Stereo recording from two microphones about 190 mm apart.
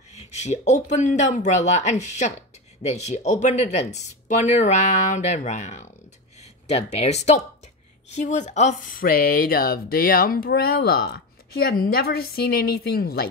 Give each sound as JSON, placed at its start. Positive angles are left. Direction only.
{"t": 0.4, "sound": "speech", "side_deg": 35}